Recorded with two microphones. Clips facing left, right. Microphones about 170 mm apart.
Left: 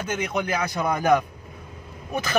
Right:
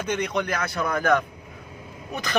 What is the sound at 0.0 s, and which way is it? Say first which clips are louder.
Speech: right 1 dB; 5° left (ahead or behind).